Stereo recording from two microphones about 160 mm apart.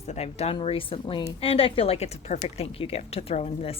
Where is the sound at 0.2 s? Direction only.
40° left (ahead or behind).